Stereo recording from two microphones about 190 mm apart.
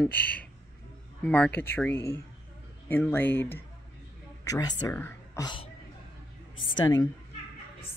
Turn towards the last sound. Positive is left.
turn(degrees=20)  # may be behind; listen again after turning